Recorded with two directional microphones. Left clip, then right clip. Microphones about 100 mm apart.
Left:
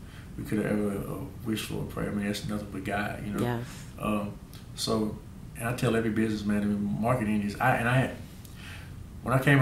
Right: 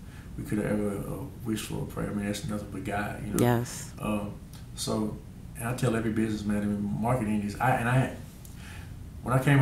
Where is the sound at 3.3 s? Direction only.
30° right (ahead or behind).